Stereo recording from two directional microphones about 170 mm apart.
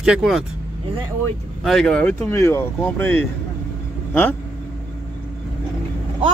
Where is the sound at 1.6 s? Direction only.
Centre (ahead or behind).